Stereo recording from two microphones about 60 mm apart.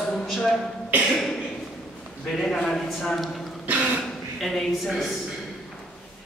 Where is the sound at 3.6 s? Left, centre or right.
Right.